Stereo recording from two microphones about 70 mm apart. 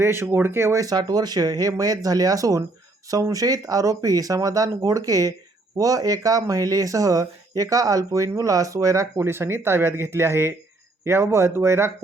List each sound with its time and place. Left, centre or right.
0.0 s speech: right
0.8 s speech: right